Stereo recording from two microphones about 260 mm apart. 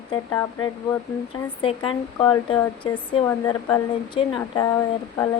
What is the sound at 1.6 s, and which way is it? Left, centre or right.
Speech, centre.